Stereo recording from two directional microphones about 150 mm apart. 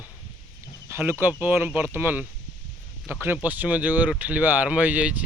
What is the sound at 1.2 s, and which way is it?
Speech, 10° right (ahead or behind).